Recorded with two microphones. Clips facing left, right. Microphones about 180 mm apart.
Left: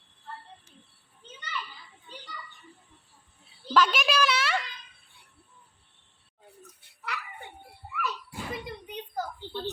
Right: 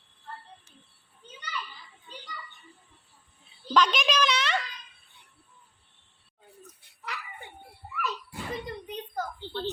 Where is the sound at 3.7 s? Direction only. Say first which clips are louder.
Even; 5° left (ahead or behind).